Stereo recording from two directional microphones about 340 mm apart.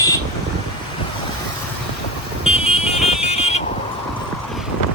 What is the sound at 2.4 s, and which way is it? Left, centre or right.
Vehicle, centre.